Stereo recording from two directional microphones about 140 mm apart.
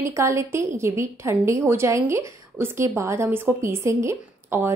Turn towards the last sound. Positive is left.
turn(degrees=-15)  # may be behind; listen again after turning